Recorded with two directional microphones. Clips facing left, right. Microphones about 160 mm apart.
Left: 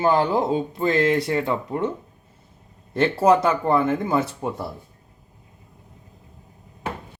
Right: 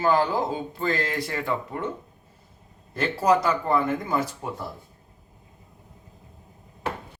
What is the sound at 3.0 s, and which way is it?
Speech, 25° left (ahead or behind).